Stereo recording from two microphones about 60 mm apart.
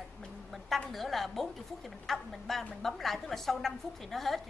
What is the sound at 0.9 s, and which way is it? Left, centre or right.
A woman's voice, centre.